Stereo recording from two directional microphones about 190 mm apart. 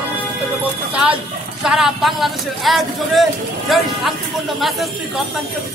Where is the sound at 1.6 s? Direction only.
Centre (ahead or behind).